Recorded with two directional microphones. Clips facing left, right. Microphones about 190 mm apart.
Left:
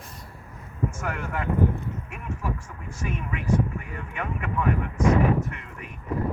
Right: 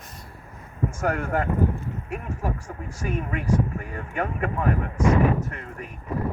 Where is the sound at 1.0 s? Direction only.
45° right (ahead or behind).